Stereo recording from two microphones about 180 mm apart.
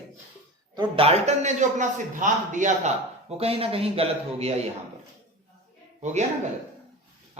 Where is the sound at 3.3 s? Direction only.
35° right (ahead or behind).